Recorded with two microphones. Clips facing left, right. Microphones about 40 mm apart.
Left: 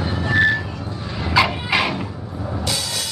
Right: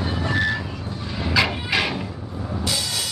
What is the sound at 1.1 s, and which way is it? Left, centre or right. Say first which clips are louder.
Dog: left 3 dB; centre.